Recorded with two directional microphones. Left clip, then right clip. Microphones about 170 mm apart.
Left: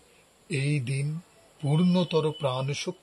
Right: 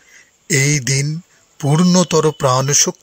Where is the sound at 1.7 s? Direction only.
40° right (ahead or behind).